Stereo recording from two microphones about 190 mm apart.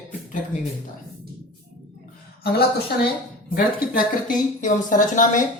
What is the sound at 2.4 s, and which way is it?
Speech, 55° left (ahead or behind).